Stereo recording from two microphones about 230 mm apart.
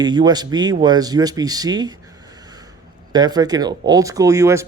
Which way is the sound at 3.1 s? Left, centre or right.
Centre.